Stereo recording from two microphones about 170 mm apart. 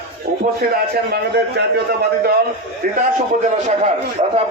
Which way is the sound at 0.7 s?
70° right (ahead or behind).